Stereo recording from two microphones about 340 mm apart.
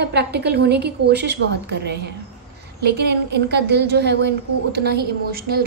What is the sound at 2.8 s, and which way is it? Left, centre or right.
A woman's voice, right.